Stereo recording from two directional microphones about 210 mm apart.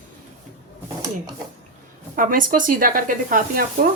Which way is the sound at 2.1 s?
40° right (ahead or behind).